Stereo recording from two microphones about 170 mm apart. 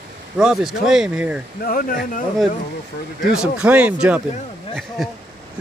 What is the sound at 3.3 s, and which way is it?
Speech, 5° right (ahead or behind).